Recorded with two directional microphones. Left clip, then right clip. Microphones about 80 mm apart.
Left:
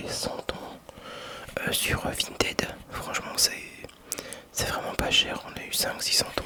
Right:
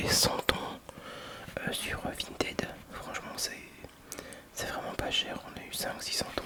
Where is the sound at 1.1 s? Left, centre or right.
Left.